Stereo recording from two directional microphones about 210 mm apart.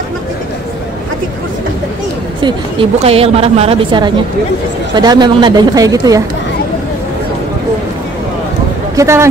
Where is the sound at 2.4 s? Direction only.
25° right (ahead or behind).